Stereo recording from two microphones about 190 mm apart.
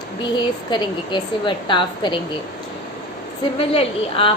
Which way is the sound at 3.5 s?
30° left (ahead or behind).